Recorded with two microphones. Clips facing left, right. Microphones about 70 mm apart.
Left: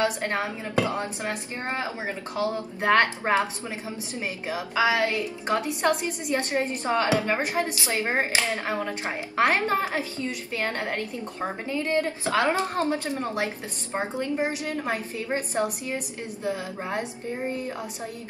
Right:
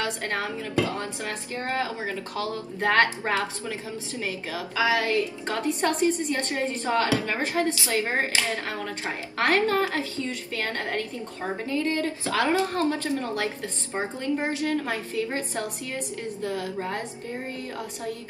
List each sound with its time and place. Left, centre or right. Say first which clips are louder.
0.0 s a woman's voice: left 3 dB; left